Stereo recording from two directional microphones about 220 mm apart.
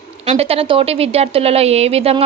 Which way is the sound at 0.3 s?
25° right (ahead or behind).